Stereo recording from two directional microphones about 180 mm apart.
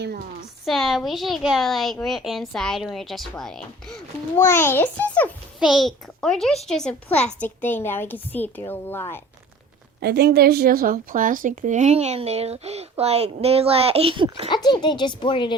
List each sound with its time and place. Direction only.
0.0 s speech: 60° right (ahead or behind)
0.6 s a woman's voice: centre (ahead or behind)
4.4 s a woman's voice: 15° left (ahead or behind)
10.0 s speech: 60° right (ahead or behind); by 14.3 s 30° right (ahead or behind)
14.5 s speech: 25° left (ahead or behind)